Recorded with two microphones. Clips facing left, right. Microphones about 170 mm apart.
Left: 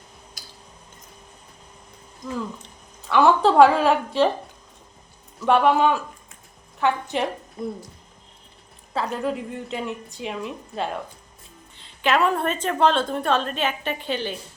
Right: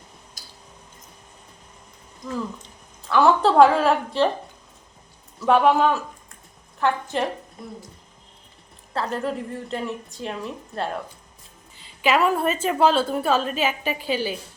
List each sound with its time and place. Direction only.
0.4 s a sound: 65° left (ahead or behind)
3.1 s a woman's voice: centre (ahead or behind)
5.5 s a woman's voice: centre (ahead or behind)
8.9 s a woman's voice: centre (ahead or behind)